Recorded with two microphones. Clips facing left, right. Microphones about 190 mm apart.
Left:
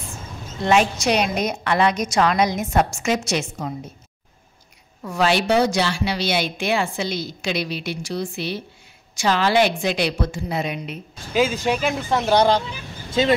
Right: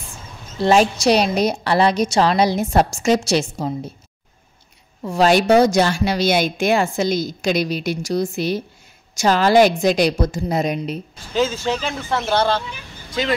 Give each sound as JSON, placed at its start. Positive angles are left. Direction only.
{"t": 0.6, "sound": "a woman's voice", "side_deg": -35}
{"t": 5.0, "sound": "a woman's voice", "side_deg": -30}
{"t": 5.3, "sound": "a woman's voice", "side_deg": -45}
{"t": 11.3, "sound": "speech", "side_deg": 15}